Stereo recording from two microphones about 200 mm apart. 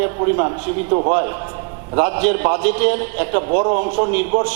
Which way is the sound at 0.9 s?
30° right (ahead or behind).